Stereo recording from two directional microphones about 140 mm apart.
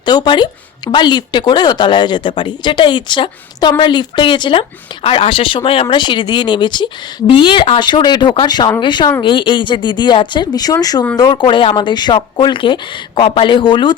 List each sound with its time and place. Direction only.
0.0 s speech: 30° left (ahead or behind)